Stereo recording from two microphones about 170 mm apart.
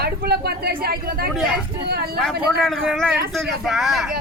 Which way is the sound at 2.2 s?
5° left (ahead or behind).